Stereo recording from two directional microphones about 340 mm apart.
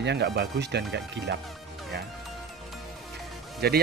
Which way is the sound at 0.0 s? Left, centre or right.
Right.